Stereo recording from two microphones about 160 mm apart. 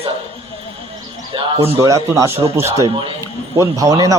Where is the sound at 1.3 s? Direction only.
35° right (ahead or behind).